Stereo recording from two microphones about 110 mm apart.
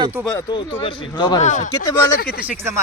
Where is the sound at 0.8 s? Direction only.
50° left (ahead or behind).